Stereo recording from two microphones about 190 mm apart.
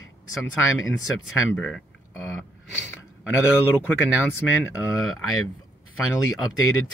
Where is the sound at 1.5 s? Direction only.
5° left (ahead or behind).